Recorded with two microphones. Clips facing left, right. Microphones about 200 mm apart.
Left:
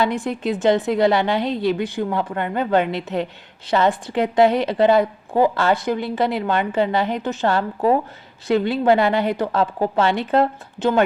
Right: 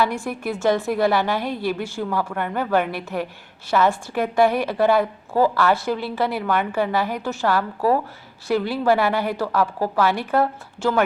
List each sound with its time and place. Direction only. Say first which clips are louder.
0.0 s a woman's voice: left 2 dB; 20° left (ahead or behind)